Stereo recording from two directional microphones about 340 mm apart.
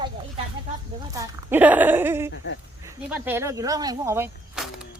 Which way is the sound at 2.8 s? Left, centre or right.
Centre.